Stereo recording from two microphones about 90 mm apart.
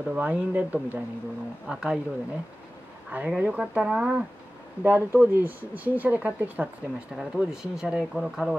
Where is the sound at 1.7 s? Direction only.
5° right (ahead or behind).